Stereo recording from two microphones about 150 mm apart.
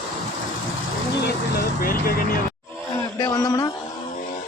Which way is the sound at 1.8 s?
75° left (ahead or behind).